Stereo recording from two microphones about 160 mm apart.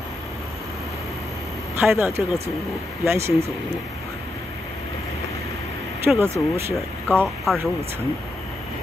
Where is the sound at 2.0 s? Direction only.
15° right (ahead or behind).